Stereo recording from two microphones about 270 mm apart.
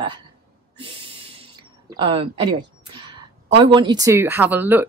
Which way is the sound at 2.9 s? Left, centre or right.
Centre.